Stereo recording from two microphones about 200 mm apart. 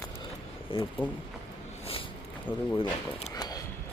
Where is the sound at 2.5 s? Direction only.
25° left (ahead or behind).